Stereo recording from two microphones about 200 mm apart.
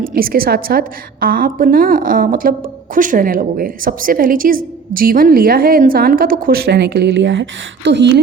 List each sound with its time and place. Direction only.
0.0 s a woman's voice: 45° right (ahead or behind)